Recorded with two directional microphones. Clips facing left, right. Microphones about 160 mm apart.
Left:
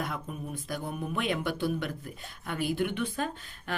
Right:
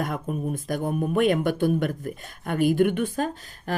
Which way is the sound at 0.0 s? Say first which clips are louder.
Right 8 dB; 50° right (ahead or behind).